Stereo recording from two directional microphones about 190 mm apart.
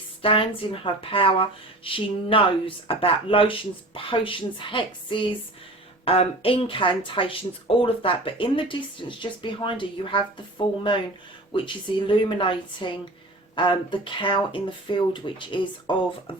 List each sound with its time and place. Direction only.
0.2 s a woman's voice: 30° left (ahead or behind)
11.5 s a woman's voice: 25° left (ahead or behind)